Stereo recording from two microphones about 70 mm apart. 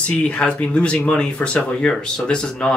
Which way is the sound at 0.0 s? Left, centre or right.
Centre.